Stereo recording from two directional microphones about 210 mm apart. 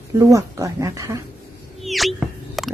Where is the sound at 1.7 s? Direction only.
Centre (ahead or behind).